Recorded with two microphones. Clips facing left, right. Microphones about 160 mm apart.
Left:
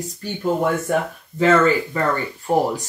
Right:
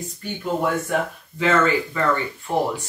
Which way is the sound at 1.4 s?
40° left (ahead or behind).